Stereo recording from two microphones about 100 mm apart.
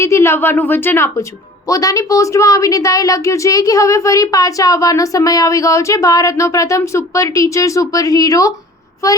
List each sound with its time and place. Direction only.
0.0 s a woman's voice: 30° left (ahead or behind)
1.6 s a woman's voice: 35° left (ahead or behind)